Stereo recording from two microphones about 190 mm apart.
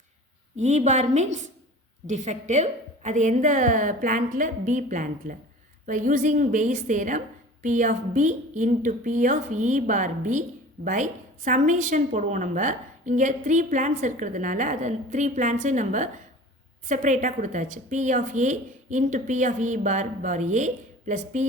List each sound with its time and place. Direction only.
0.5 s a woman's voice: 35° right (ahead or behind)